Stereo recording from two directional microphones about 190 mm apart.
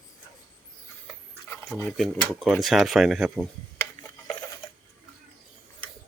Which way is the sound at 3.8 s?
20° left (ahead or behind).